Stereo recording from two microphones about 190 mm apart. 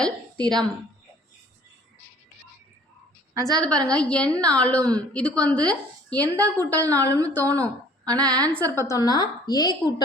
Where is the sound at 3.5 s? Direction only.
5° left (ahead or behind).